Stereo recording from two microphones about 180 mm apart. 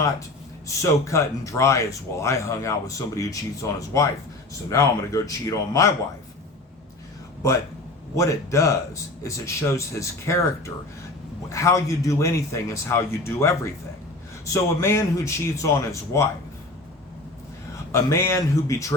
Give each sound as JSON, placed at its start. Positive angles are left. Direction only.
{"t": 0.7, "sound": "speech", "side_deg": 15}
{"t": 8.1, "sound": "speech", "side_deg": 15}
{"t": 11.4, "sound": "speech", "side_deg": 15}
{"t": 17.9, "sound": "speech", "side_deg": 15}